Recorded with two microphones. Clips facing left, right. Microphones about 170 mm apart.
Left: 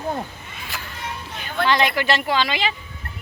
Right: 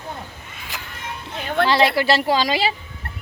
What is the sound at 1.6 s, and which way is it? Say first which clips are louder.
Speech: right 2 dB; 35° right (ahead or behind).